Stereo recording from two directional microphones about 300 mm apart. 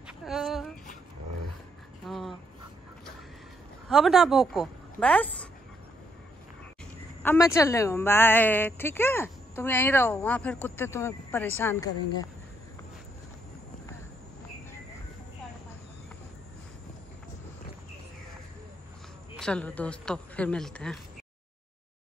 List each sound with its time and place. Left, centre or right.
0.0 s a sound: centre
2.0 s crow: centre
3.9 s a woman's voice: centre
7.2 s a woman's voice: centre
19.3 s speech: centre